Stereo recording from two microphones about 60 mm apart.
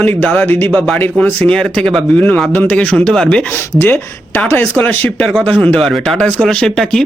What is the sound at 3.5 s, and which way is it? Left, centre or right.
Speech, left.